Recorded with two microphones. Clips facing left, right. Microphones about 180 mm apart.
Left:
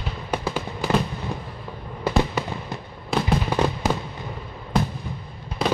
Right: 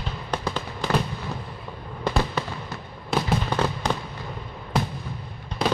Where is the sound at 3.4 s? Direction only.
10° left (ahead or behind).